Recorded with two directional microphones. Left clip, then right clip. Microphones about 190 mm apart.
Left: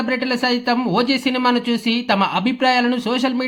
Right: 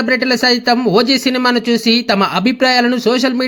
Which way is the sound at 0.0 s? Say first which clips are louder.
Right 7 dB; 20° right (ahead or behind).